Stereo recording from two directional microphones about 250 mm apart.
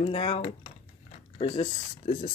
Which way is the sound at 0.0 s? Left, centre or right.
Left.